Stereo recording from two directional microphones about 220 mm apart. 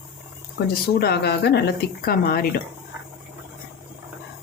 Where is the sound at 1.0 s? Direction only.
45° left (ahead or behind).